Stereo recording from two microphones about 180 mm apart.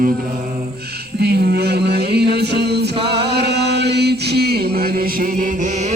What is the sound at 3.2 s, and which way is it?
Chant, 65° right (ahead or behind).